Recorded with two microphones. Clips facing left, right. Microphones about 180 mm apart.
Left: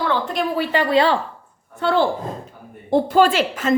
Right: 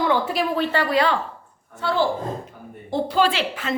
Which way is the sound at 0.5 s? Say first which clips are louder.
Left 4 dB; 15° left (ahead or behind).